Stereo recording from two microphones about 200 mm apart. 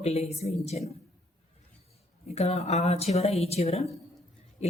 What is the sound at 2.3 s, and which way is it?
A woman's voice, 30° left (ahead or behind).